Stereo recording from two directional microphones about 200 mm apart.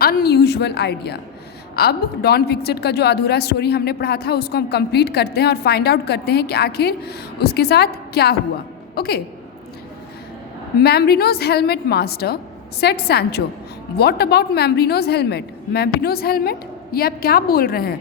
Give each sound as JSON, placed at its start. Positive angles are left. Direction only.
{"t": 0.0, "sound": "a woman's voice", "side_deg": 50}
{"t": 10.8, "sound": "a woman's voice", "side_deg": 50}